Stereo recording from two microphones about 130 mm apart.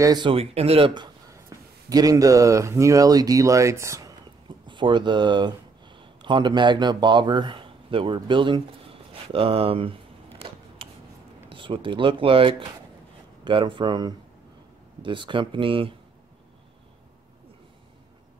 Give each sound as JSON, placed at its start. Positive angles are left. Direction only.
{"t": 0.0, "sound": "speech", "side_deg": -30}
{"t": 0.3, "sound": "speech", "side_deg": -50}
{"t": 1.3, "sound": "speech", "side_deg": -25}
{"t": 4.6, "sound": "speech", "side_deg": -35}
{"t": 11.5, "sound": "speech", "side_deg": -40}